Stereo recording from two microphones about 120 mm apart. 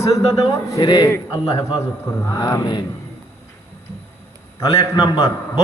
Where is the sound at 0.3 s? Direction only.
25° left (ahead or behind).